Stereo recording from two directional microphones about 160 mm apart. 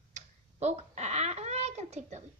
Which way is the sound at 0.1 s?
45° right (ahead or behind).